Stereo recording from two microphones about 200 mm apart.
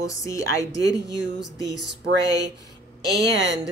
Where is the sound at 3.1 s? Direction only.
60° right (ahead or behind).